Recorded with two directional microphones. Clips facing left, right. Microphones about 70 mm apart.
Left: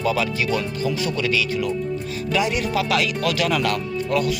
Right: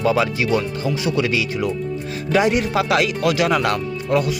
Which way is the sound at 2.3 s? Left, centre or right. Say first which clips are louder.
Right 5 dB; right.